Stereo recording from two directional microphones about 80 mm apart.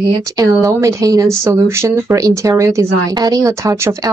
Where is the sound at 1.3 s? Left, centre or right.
Right.